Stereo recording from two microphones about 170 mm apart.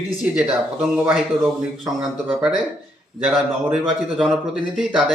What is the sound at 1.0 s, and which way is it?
A man's voice, 5° right (ahead or behind).